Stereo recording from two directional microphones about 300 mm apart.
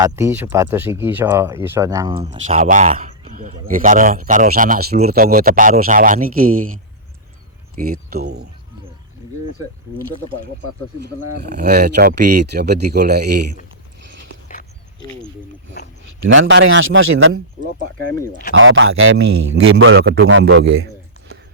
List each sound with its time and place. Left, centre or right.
0.0 s speech: centre; by 6.7 s right
7.8 s a man's voice: right
11.3 s a man's voice: right
14.4 s a sound: left
16.2 s a man's voice: right
17.6 s speech: right
18.5 s a man's voice: right
19.3 s a man's voice: right
19.8 s a man's voice: right